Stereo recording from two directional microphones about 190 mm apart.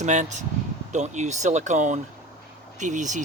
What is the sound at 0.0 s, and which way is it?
Speech, 40° right (ahead or behind).